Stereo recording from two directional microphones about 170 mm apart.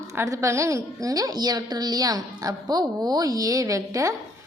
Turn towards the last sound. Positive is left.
turn(degrees=-20)  # may be behind; listen again after turning